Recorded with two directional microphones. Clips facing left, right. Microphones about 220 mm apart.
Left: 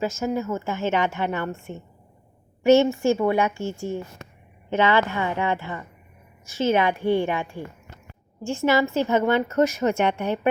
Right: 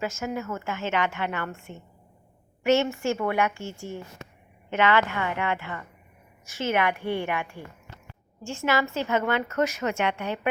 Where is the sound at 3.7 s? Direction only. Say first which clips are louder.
Left 7 dB; 50° left (ahead or behind).